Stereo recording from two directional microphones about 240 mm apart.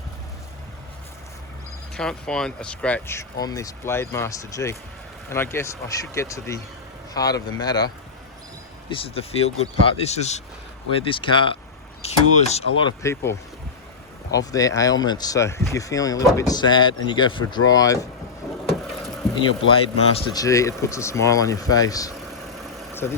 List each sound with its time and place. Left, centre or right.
2.0 s speech: centre
8.9 s speech: left
12.8 s speech: centre
18.4 s vehicle: centre
19.4 s speech: left